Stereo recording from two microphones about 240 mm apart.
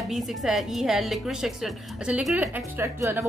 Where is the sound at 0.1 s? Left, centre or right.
Centre.